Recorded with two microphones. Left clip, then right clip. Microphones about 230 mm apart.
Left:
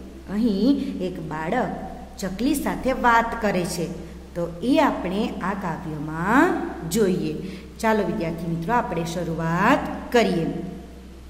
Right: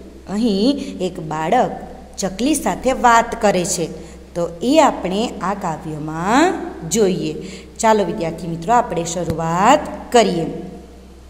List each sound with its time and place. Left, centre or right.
0.3 s a woman's voice: right